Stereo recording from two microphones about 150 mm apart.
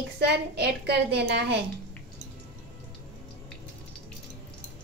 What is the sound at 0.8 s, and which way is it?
Speech, 90° right.